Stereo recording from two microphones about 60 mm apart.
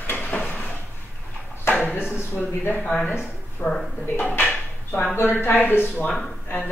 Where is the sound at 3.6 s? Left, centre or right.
Left.